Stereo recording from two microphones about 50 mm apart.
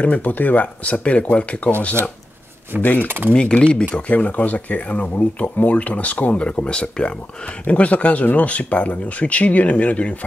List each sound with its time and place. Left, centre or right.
0.0 s speech: left
2.8 s speech: left
3.1 s speech: right
3.3 s speech: left
4.1 s speech: left